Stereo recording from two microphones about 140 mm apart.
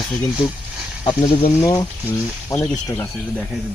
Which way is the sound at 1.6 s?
25° left (ahead or behind).